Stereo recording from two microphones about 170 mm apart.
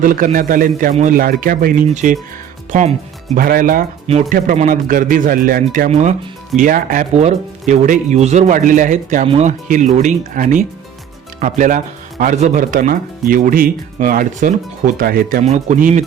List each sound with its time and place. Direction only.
0.0 s speech: 55° right (ahead or behind)
3.3 s speech: 55° right (ahead or behind)
5.9 s speech: 45° right (ahead or behind)
6.6 s speech: 55° right (ahead or behind)
9.2 s speech: 35° right (ahead or behind)
9.5 s speech: 50° right (ahead or behind)
15.4 s speech: 45° right (ahead or behind)